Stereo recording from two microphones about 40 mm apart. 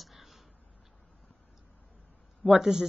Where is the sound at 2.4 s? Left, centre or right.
Centre.